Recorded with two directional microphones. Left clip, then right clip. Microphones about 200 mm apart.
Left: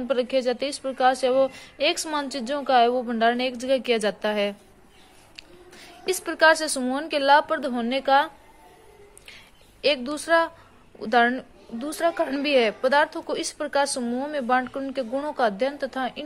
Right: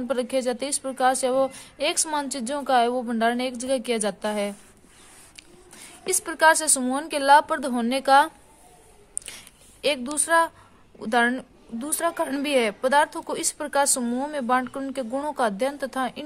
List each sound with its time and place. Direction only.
0.1 s a woman's voice: 20° right (ahead or behind)
9.8 s a woman's voice: 20° right (ahead or behind)